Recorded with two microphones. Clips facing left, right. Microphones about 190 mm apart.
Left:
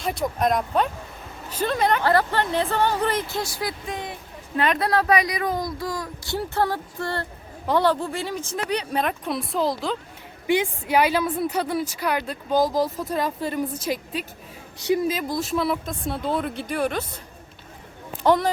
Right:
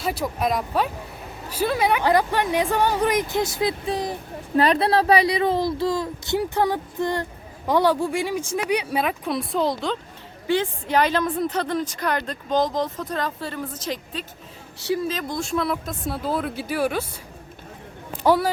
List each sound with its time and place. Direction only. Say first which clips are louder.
0.0 s speech: left 1 dB; 5° right (ahead or behind)
10.4 s a woman's voice: even; 15° left (ahead or behind); by 17.2 s 10° right (ahead or behind)
18.2 s speech: even; 5° right (ahead or behind)